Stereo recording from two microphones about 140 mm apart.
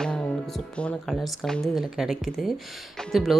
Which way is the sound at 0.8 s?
5° left (ahead or behind).